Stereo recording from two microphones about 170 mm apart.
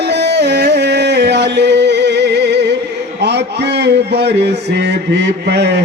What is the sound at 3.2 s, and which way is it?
A man's voice, 85° right.